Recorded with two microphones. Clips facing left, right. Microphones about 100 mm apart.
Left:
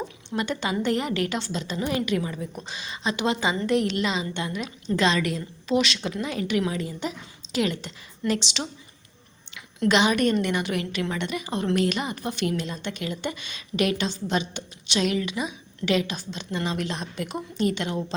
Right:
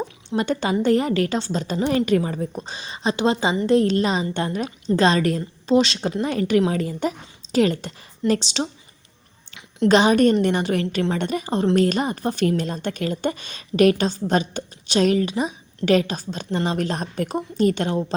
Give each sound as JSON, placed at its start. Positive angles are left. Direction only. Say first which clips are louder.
{"t": 0.3, "sound": "a woman's voice", "louder": "right 5 dB", "side_deg": -40}
{"t": 9.9, "sound": "a woman's voice", "louder": "right 6 dB", "side_deg": -40}